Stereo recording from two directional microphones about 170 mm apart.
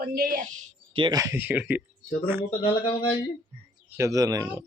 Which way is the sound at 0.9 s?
25° right (ahead or behind).